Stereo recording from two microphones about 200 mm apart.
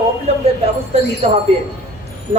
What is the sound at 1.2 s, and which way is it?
Speech, 30° right (ahead or behind).